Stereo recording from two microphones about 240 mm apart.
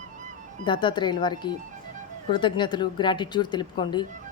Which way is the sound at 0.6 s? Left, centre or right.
Centre.